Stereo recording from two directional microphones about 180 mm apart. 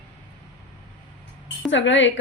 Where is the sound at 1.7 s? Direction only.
90° left.